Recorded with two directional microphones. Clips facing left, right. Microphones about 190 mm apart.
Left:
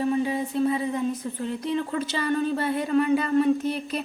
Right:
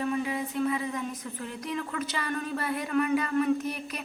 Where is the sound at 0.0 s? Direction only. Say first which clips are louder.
Left 5 dB; 30° left (ahead or behind).